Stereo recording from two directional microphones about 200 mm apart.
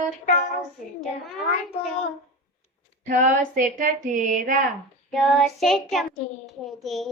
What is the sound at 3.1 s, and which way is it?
Speech, 40° right (ahead or behind).